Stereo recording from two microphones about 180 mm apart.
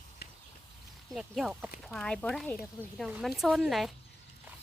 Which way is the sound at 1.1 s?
Centre (ahead or behind).